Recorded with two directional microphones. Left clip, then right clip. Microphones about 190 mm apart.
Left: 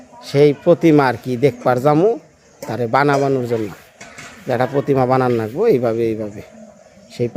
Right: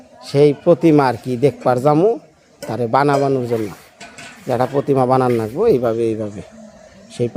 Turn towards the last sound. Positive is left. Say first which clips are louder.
# right 1 dB
turn(degrees=0)  # may be behind; listen again after turning